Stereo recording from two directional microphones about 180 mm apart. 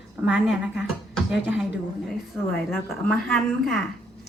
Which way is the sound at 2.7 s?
Centre (ahead or behind).